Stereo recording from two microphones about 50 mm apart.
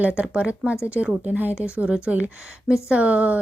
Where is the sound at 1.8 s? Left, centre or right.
Right.